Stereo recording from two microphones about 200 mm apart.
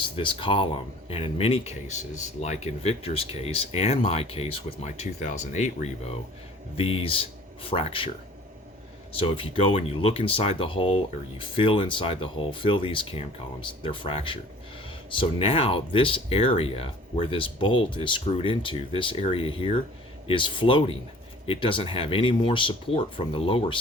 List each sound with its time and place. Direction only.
0.0 s speech: 25° left (ahead or behind)
9.1 s speech: 25° left (ahead or behind)